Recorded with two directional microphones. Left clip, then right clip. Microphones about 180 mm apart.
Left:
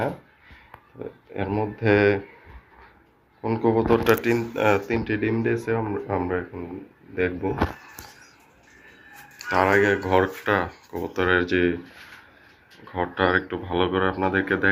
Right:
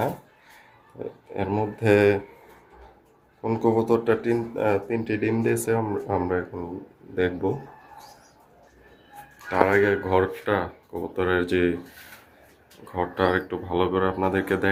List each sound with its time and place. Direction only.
0.9 s speech: 10° right (ahead or behind)
3.4 s speech: 5° right (ahead or behind); by 7.5 s 20° right (ahead or behind)
9.5 s speech: centre (ahead or behind)
12.8 s speech: 5° right (ahead or behind)